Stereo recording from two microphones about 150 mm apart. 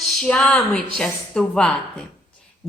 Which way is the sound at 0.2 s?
5° left (ahead or behind).